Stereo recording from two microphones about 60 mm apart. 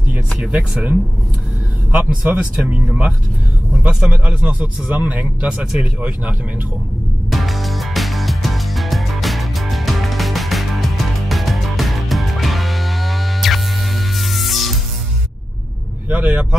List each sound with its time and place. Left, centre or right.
0.1 s a man's voice: right
7.2 s music: centre
16.1 s a man's voice: right